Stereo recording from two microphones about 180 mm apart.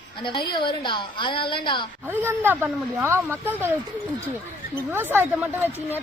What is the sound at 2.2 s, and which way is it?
Speech, 10° right (ahead or behind).